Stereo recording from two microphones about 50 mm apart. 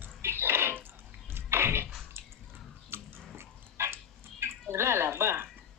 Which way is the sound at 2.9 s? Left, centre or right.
Right.